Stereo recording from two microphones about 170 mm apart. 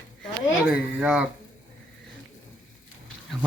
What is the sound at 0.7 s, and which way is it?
Speech, 5° right (ahead or behind).